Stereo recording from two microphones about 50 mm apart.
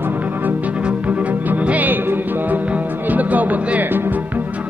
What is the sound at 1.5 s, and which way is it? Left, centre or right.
Speech, right.